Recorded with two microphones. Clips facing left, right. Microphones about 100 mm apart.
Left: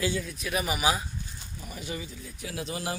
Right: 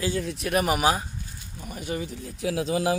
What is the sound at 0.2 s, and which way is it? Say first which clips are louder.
Speech: right 6 dB; 65° right (ahead or behind).